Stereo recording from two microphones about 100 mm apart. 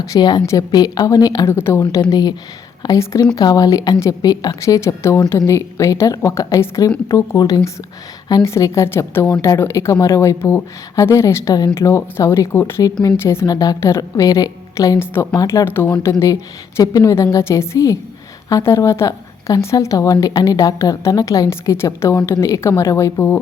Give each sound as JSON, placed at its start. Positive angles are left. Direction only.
{"t": 0.1, "sound": "a woman's voice", "side_deg": 45}
{"t": 1.5, "sound": "a woman's voice", "side_deg": 25}
{"t": 1.8, "sound": "a woman's voice", "side_deg": 40}
{"t": 12.8, "sound": "a woman's voice", "side_deg": 35}
{"t": 14.9, "sound": "a woman's voice", "side_deg": 25}
{"t": 15.4, "sound": "a woman's voice", "side_deg": 35}
{"t": 15.6, "sound": "a woman's voice", "side_deg": 20}